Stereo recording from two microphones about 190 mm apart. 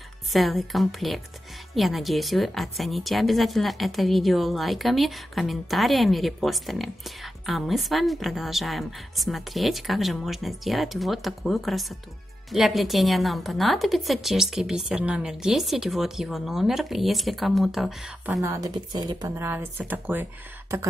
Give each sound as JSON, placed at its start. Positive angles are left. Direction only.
{"t": 0.3, "sound": "a woman's voice", "side_deg": 0}
{"t": 18.4, "sound": "speech", "side_deg": -15}